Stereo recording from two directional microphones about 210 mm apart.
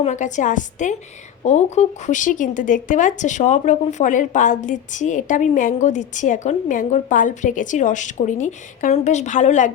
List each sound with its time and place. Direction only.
0.0 s speech: 35° left (ahead or behind)